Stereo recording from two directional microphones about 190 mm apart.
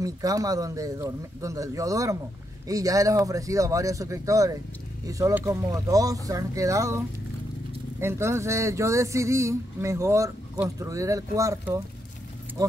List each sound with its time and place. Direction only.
0.0 s speech: 20° right (ahead or behind)
8.0 s speech: 15° right (ahead or behind)